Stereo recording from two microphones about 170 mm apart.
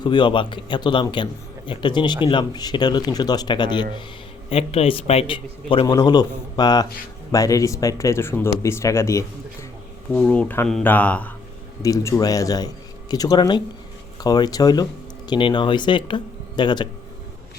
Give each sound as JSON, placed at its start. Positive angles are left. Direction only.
{"t": 0.0, "sound": "a man's voice", "side_deg": 25}
{"t": 11.8, "sound": "a man's voice", "side_deg": 20}